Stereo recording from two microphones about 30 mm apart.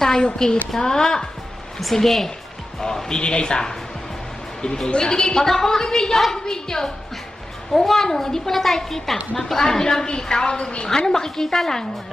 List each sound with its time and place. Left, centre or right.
0.2 s a woman's voice: left
3.2 s a woman's voice: left